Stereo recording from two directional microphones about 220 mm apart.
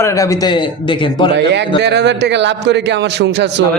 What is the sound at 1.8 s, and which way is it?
Speech, 50° right (ahead or behind).